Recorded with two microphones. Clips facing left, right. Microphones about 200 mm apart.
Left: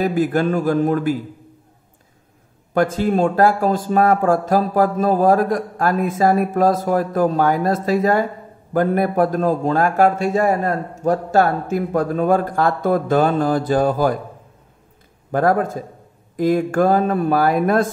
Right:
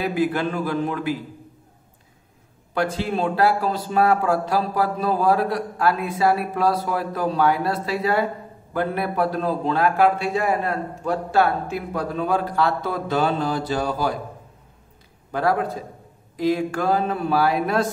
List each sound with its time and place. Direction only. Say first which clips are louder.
0.0 s speech: left 4 dB; 45° left (ahead or behind)
2.7 s speech: left 6 dB; 45° left (ahead or behind)
15.3 s speech: left 5 dB; 50° left (ahead or behind)